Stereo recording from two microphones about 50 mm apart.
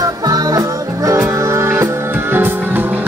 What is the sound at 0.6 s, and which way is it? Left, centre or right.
Music, right.